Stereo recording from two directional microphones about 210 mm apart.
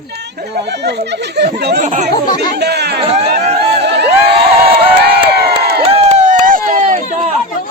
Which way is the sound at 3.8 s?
55° right (ahead or behind).